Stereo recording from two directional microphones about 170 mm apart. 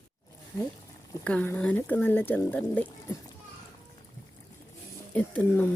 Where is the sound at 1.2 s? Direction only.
5° left (ahead or behind).